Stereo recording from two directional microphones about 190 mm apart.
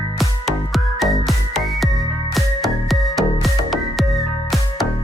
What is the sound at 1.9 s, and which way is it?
Music, 20° left (ahead or behind).